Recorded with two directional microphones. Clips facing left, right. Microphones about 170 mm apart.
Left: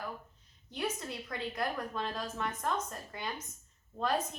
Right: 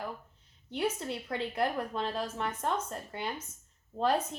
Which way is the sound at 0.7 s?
25° right (ahead or behind).